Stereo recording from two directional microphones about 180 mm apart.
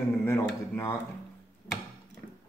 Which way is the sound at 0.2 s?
15° left (ahead or behind).